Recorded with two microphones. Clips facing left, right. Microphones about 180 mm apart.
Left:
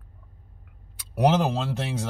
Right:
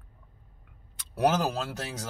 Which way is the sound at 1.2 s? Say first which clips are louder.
Left 4 dB; 25° left (ahead or behind).